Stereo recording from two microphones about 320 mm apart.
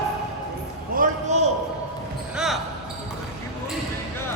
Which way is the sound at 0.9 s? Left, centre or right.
Right.